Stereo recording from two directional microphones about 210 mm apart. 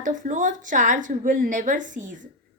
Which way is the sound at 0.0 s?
35° right (ahead or behind).